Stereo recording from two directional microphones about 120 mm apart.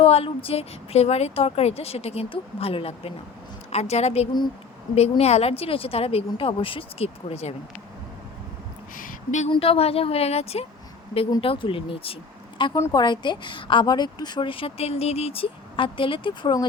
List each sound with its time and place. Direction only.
0.0 s a woman's voice: 55° left (ahead or behind)
3.7 s a woman's voice: 65° left (ahead or behind)
9.5 s a woman's voice: 55° left (ahead or behind)
11.3 s a woman's voice: 45° left (ahead or behind)
12.7 s a woman's voice: 30° left (ahead or behind)